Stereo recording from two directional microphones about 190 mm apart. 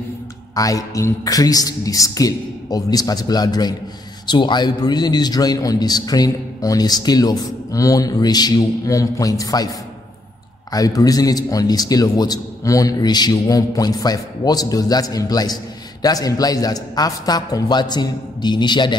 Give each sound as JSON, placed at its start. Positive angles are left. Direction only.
{"t": 0.6, "sound": "a man's voice", "side_deg": 20}
{"t": 10.7, "sound": "a man's voice", "side_deg": 20}